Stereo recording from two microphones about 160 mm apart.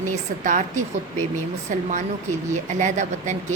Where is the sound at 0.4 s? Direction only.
50° right (ahead or behind).